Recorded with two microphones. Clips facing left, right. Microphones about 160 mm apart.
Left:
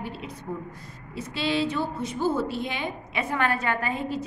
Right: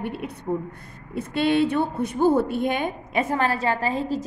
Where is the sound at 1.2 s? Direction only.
55° right (ahead or behind).